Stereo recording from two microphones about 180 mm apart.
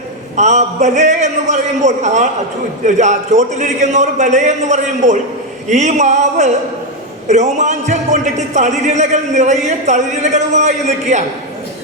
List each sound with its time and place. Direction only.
0.3 s a man's voice: 40° right (ahead or behind)